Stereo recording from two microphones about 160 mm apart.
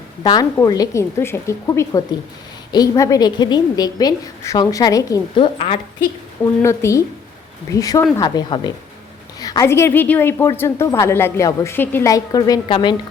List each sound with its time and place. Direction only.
0.2 s a woman's voice: 25° left (ahead or behind)
6.6 s a woman's voice: 20° left (ahead or behind)